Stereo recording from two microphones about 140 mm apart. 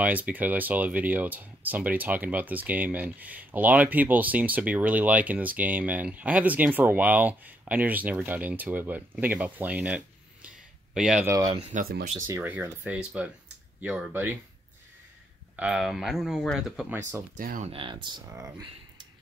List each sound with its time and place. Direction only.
0.0 s speech: 10° right (ahead or behind)
11.2 s speech: 25° right (ahead or behind)
11.7 s speech: 90° right
12.4 s speech: 15° right (ahead or behind)
15.5 s speech: 5° right (ahead or behind)
17.4 s speech: 80° right
17.6 s speech: 40° right (ahead or behind)